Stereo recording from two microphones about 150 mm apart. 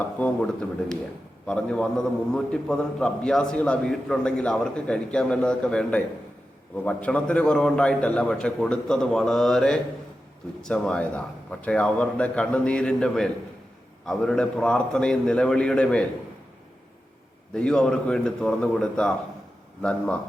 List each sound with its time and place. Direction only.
0.2 s a man's voice: 5° left (ahead or behind)
17.5 s a man's voice: 5° left (ahead or behind)